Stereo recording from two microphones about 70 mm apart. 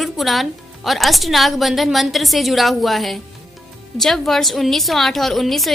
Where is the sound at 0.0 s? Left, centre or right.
Centre.